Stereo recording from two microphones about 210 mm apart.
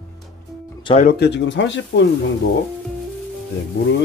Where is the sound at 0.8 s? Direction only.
25° left (ahead or behind).